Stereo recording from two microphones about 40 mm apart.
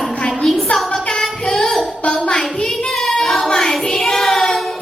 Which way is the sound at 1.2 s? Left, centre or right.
Centre.